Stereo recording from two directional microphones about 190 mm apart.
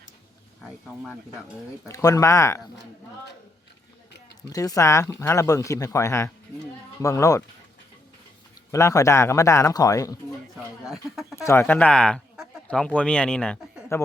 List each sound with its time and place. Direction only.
1.9 s speech: 20° left (ahead or behind)
4.4 s speech: 20° left (ahead or behind)
8.7 s speech: 15° left (ahead or behind)
10.8 s speech: centre (ahead or behind)
11.4 s speech: 10° left (ahead or behind)